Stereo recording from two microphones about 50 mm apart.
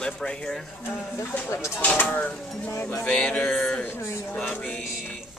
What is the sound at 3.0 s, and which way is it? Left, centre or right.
Mantra, left.